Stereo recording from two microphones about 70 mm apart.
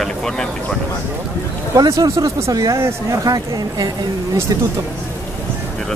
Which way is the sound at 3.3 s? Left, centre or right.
Right.